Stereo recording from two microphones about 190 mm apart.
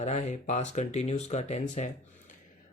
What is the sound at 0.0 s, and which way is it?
Speech, 35° left (ahead or behind).